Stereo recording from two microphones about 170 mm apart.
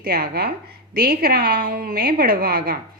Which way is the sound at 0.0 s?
65° right (ahead or behind).